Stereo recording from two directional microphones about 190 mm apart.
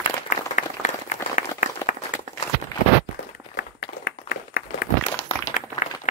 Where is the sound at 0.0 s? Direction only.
40° left (ahead or behind).